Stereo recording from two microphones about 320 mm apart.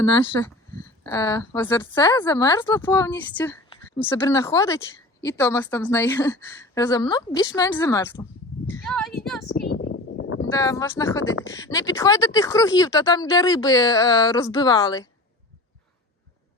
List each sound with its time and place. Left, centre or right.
0.3 s a woman's voice: centre
8.7 s a sound: centre
9.9 s a sound: left
10.5 s a woman's voice: centre
11.2 s speech: left
11.4 s a woman's voice: centre